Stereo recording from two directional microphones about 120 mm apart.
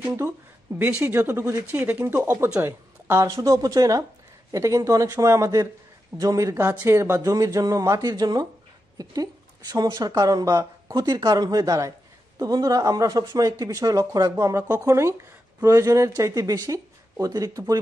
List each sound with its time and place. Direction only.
0.7 s a woman's voice: 15° right (ahead or behind); by 17.7 s 30° right (ahead or behind)